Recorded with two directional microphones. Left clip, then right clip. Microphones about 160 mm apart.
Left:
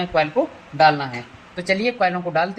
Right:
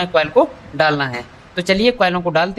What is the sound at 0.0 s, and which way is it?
Speech, 50° right (ahead or behind).